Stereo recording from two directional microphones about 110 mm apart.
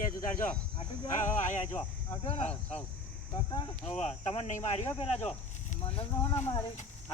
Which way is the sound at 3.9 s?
90° left.